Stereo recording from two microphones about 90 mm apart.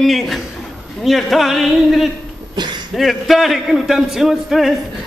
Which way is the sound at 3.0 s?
Centre (ahead or behind).